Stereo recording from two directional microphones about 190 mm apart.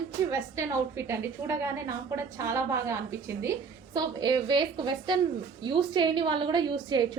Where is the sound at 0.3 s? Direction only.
15° right (ahead or behind).